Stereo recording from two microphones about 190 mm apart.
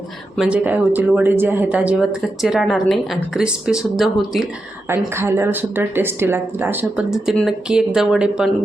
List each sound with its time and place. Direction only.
0.3 s speech: 5° right (ahead or behind)
4.9 s speech: 15° right (ahead or behind)